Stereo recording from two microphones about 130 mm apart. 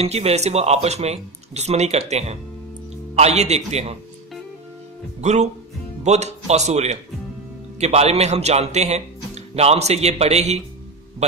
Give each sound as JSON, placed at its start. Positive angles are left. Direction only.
{"t": 0.0, "sound": "a man's voice", "side_deg": -55}
{"t": 5.2, "sound": "a man's voice", "side_deg": -60}